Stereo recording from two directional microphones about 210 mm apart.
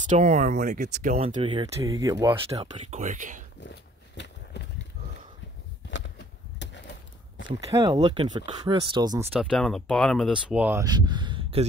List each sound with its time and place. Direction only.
0.0 s speech: 35° right (ahead or behind)
3.0 s speech: 35° right (ahead or behind)
5.9 s a sound: 55° left (ahead or behind)
7.4 s speech: 20° right (ahead or behind)
9.4 s speech: centre (ahead or behind); by 11.6 s 25° right (ahead or behind)